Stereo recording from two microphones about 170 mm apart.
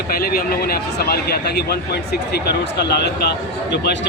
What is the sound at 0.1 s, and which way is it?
A man's voice, 60° left (ahead or behind).